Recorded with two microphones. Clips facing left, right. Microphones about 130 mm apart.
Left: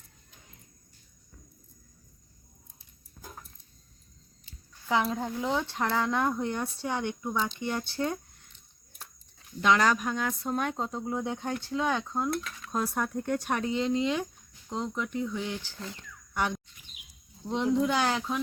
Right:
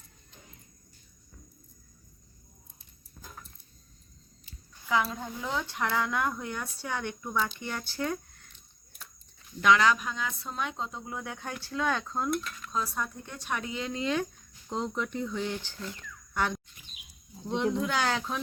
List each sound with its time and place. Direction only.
3.2 s a sound: 20° left (ahead or behind)
5.2 s speech: 25° left (ahead or behind)
7.3 s speech: 30° left (ahead or behind)
9.7 s speech: 45° left (ahead or behind); by 12.3 s 15° left (ahead or behind)
12.7 s speech: 55° left (ahead or behind); by 14.3 s 20° left (ahead or behind)
14.7 s speech: centre (ahead or behind)
15.8 s speech: 25° left (ahead or behind)
17.4 s a sound: 5° left (ahead or behind)
17.9 s speech: 10° left (ahead or behind)